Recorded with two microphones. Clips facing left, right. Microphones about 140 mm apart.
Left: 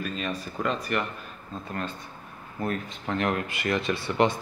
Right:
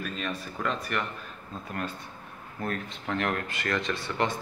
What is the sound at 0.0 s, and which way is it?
Speech, centre (ahead or behind).